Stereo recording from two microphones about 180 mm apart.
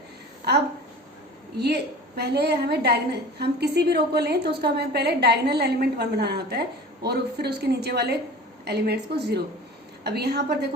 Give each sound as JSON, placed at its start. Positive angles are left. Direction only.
{"t": 1.5, "sound": "a woman's voice", "side_deg": -65}